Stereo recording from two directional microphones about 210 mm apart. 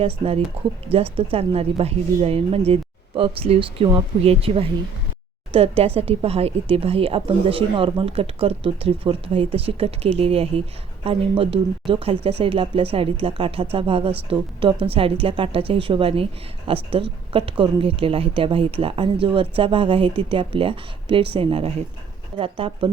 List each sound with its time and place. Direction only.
0.0 s speech: 25° right (ahead or behind)